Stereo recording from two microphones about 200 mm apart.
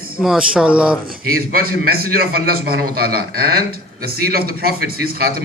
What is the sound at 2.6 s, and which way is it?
A man's voice, 50° right (ahead or behind).